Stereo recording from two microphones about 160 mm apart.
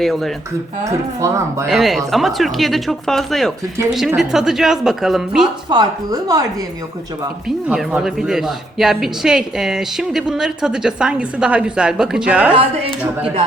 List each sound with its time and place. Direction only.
0.0 s a woman's voice: centre (ahead or behind)
0.9 s speech: 20° right (ahead or behind)
1.6 s a woman's voice: centre (ahead or behind)
5.6 s speech: 25° right (ahead or behind)
7.4 s a woman's voice: 5° right (ahead or behind)